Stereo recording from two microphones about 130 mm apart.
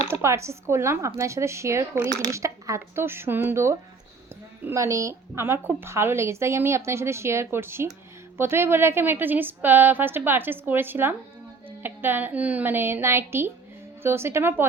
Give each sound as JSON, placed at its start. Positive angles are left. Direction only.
{"t": 0.1, "sound": "a woman's voice", "side_deg": -20}